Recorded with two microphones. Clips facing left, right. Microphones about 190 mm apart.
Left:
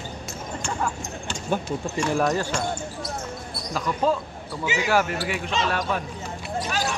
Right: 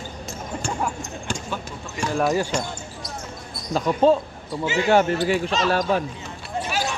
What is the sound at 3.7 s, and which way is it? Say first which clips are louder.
Music: right 6 dB; 30° right (ahead or behind).